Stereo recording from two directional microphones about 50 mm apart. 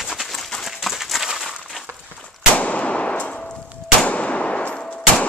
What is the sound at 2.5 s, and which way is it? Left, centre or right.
Gunshot, left.